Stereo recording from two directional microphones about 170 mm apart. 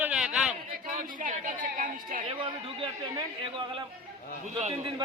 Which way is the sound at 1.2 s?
50° right (ahead or behind).